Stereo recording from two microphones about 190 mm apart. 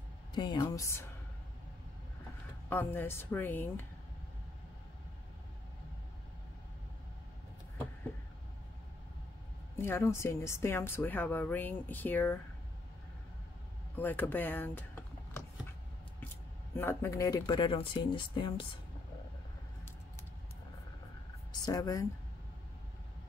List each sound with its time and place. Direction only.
0.3 s speech: 25° left (ahead or behind)
2.7 s a woman's voice: 10° left (ahead or behind)
9.8 s a woman's voice: 15° left (ahead or behind)
13.9 s a woman's voice: 10° left (ahead or behind)
16.7 s speech: 10° left (ahead or behind)
21.6 s speech: 20° left (ahead or behind)